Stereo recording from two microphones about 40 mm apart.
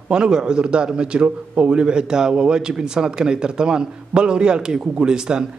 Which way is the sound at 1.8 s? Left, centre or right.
Right.